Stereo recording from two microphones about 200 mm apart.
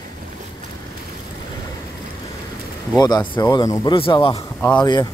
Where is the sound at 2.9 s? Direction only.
20° left (ahead or behind).